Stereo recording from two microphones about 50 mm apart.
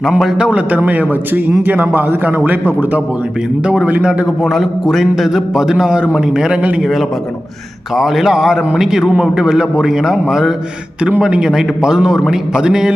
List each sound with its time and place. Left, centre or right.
0.3 s a man's voice: centre
0.7 s a man's voice: right
4.4 s a man's voice: centre
7.9 s a man's voice: centre